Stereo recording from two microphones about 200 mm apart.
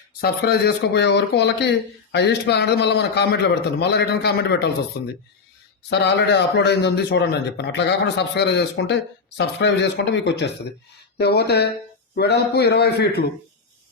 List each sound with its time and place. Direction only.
0.2 s a man's voice: 50° left (ahead or behind)